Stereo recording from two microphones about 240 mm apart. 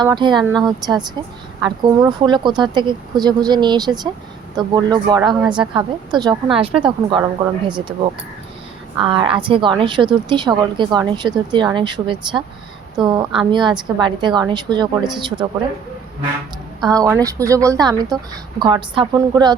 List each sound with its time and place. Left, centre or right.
0.0 s a woman's voice: centre
0.4 s a woman's voice: centre
1.6 s a woman's voice: centre
9.0 s a woman's voice: right
16.9 s speech: centre